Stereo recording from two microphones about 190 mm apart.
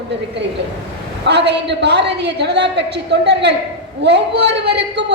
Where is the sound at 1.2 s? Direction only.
65° right (ahead or behind).